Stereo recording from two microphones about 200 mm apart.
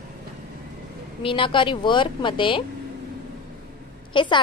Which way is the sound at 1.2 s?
25° left (ahead or behind).